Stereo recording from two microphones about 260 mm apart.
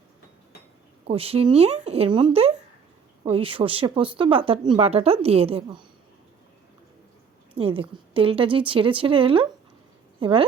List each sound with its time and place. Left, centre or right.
1.0 s speech: right
7.5 s speech: right